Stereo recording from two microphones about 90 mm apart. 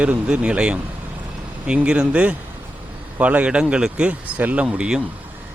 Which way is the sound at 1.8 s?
10° right (ahead or behind).